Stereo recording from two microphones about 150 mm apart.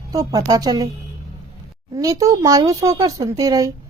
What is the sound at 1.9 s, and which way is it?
Speech, 25° right (ahead or behind).